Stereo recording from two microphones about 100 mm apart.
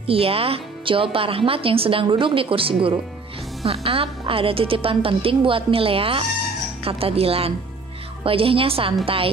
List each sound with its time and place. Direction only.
0.0 s speech: 70° right (ahead or behind)
3.6 s a woman's voice: 75° right (ahead or behind)